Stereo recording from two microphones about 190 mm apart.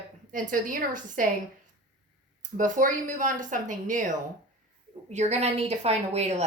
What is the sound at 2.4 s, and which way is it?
A woman's voice, 40° right (ahead or behind).